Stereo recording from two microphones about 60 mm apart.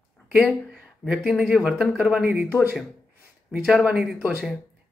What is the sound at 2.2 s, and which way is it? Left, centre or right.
Speech, right.